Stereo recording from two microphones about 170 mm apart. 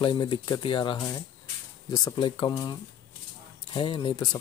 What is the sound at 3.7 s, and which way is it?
Speech, 30° left (ahead or behind).